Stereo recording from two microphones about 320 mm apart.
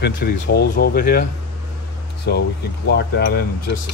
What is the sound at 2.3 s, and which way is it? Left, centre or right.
Speech, left.